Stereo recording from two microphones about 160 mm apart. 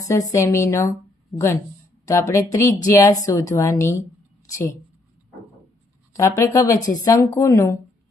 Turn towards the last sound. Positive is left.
turn(degrees=20)  # may be behind; listen again after turning